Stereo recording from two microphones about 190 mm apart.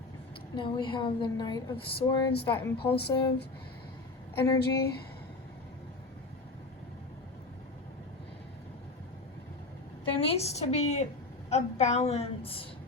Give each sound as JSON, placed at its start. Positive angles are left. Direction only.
{"t": 0.5, "sound": "a woman's voice", "side_deg": 25}
{"t": 2.0, "sound": "a woman's voice", "side_deg": 60}
{"t": 2.5, "sound": "a woman's voice", "side_deg": 10}
{"t": 2.7, "sound": "a woman's voice", "side_deg": 60}
{"t": 4.4, "sound": "a woman's voice", "side_deg": 20}
{"t": 10.2, "sound": "a woman's voice", "side_deg": 30}